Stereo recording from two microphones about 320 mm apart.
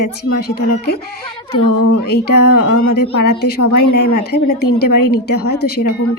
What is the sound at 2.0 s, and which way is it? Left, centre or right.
A woman's voice, left.